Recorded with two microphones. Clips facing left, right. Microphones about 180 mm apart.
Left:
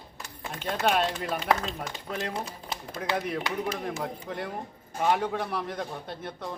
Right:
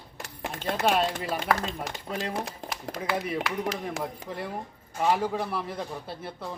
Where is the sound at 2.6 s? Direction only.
90° right.